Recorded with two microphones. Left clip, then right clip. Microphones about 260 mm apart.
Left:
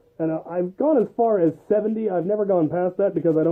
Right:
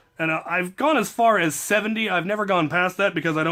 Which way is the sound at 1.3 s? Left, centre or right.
Right.